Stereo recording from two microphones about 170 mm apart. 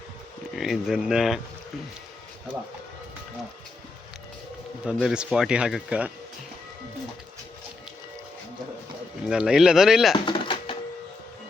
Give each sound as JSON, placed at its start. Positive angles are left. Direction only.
{"t": 0.5, "sound": "speech", "side_deg": 0}
{"t": 4.9, "sound": "speech", "side_deg": -5}
{"t": 9.2, "sound": "speech", "side_deg": -5}
{"t": 10.2, "sound": "music", "side_deg": 30}